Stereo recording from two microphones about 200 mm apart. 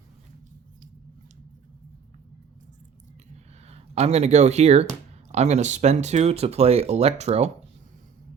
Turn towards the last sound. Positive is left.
turn(degrees=-30)  # may be behind; listen again after turning